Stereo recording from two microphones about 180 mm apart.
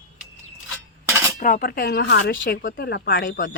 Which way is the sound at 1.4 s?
50° left (ahead or behind).